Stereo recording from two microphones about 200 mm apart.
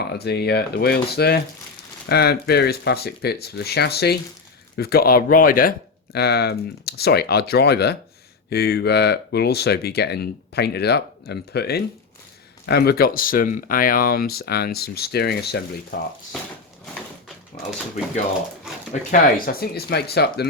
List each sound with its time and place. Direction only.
0.1 s speech: 55° left (ahead or behind)
19.1 s speech: 50° left (ahead or behind)